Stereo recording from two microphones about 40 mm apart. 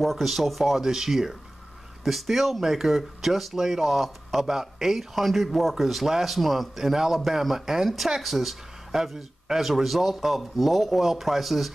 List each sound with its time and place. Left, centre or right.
0.0 s speech: centre